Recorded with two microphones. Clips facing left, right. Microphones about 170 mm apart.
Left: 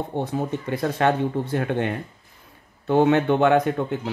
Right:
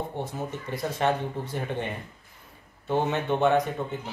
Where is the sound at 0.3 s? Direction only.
65° left (ahead or behind).